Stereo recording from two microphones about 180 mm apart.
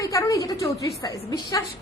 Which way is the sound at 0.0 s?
20° left (ahead or behind).